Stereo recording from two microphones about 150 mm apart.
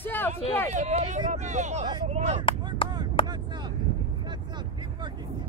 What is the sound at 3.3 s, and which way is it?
Vehicle, 30° right (ahead or behind).